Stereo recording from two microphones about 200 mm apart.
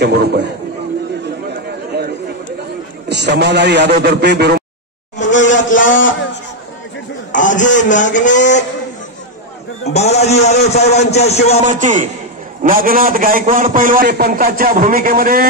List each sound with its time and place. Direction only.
0.0 s a man's voice: 55° right (ahead or behind)
1.9 s chatter: 55° right (ahead or behind)
3.1 s a man's voice: 55° right (ahead or behind)
5.7 s a sound: 40° left (ahead or behind)
7.3 s a man's voice: 40° left (ahead or behind)
9.8 s a man's voice: 35° left (ahead or behind)
11.6 s a man's voice: 40° right (ahead or behind)